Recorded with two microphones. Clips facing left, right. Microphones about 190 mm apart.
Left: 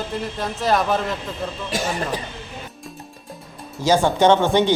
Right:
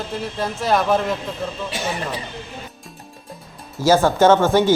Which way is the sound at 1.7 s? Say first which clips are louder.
Left 3 dB; 45° left (ahead or behind).